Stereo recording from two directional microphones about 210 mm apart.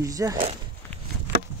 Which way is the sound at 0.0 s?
15° right (ahead or behind).